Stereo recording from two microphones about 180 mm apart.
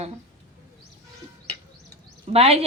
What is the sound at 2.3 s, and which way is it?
Speech, 35° right (ahead or behind).